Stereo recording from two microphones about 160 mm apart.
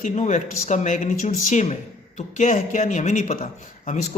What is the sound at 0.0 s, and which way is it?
A man's voice, 50° left (ahead or behind).